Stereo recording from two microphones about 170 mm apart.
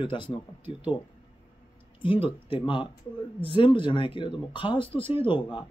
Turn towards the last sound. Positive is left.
turn(degrees=30)  # may be behind; listen again after turning